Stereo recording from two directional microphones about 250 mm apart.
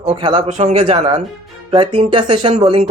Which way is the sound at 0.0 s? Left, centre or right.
Right.